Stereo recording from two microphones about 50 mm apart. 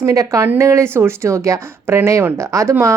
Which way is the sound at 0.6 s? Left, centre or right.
Right.